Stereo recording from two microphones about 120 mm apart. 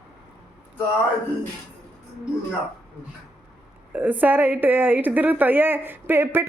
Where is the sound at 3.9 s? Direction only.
15° right (ahead or behind).